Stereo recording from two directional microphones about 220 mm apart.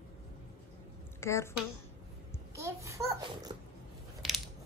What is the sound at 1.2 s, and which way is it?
Speech, 10° left (ahead or behind).